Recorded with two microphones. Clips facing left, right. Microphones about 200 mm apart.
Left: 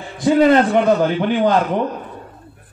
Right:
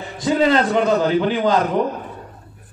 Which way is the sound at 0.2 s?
55° left (ahead or behind).